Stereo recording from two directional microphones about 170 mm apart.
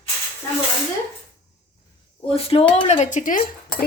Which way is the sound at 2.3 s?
35° left (ahead or behind).